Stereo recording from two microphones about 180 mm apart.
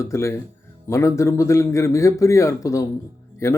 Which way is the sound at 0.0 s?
15° left (ahead or behind).